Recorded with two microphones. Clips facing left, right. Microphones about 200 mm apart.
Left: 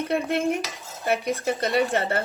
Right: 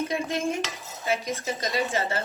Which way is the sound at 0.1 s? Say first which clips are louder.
Left 4 dB; 60° left (ahead or behind).